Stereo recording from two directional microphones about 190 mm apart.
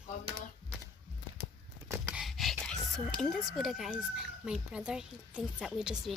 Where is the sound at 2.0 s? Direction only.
5° right (ahead or behind).